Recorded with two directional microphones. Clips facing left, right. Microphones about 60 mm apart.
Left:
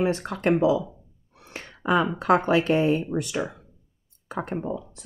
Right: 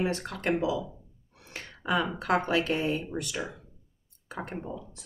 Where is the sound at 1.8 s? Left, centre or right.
Left.